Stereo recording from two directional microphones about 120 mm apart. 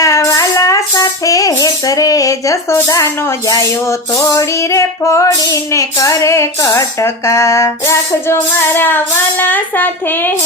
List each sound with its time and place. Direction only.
0.0 s a sound: 25° left (ahead or behind)
2.7 s female singing: 25° left (ahead or behind)
4.4 s female singing: 25° left (ahead or behind)
9.4 s speech: 15° left (ahead or behind)